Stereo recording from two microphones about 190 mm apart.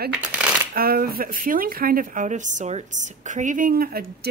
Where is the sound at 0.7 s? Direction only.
50° right (ahead or behind).